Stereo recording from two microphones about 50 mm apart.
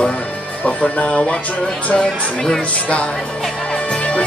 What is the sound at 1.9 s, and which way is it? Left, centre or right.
Speech, centre.